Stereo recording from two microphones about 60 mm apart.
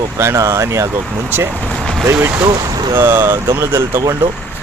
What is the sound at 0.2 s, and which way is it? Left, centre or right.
Speech, right.